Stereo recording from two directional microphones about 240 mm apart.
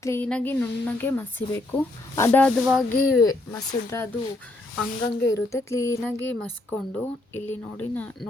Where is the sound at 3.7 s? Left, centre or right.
Centre.